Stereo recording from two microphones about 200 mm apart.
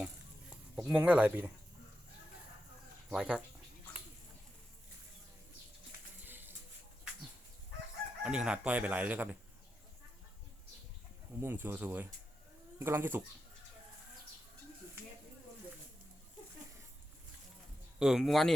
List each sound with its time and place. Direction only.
0.5 s speech: 10° right (ahead or behind)
3.1 s speech: 5° right (ahead or behind)
6.2 s music: 10° right (ahead or behind)
8.2 s speech: 5° right (ahead or behind)
11.3 s speech: 10° right (ahead or behind)
18.0 s speech: centre (ahead or behind)